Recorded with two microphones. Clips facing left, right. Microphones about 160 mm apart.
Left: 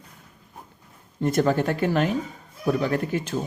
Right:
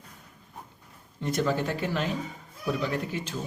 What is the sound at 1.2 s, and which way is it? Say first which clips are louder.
A man's voice: left 6 dB; 50° left (ahead or behind).